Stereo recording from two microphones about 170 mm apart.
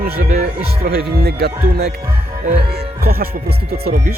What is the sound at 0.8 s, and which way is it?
Speech, 65° right (ahead or behind).